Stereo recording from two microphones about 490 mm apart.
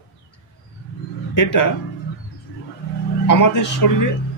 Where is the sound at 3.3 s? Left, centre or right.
Left.